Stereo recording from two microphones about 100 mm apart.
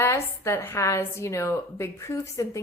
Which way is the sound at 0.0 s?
25° left (ahead or behind).